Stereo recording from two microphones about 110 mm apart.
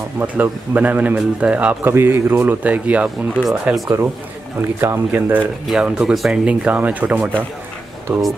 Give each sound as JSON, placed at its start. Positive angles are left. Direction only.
{"t": 0.2, "sound": "a man's voice", "side_deg": -15}
{"t": 3.4, "sound": "speech", "side_deg": 0}
{"t": 3.8, "sound": "speech", "side_deg": -25}
{"t": 5.7, "sound": "a man's voice", "side_deg": -5}